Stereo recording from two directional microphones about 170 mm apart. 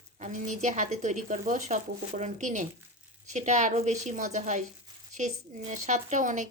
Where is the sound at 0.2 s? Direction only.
45° right (ahead or behind).